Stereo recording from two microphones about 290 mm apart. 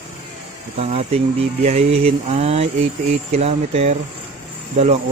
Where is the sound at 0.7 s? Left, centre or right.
Right.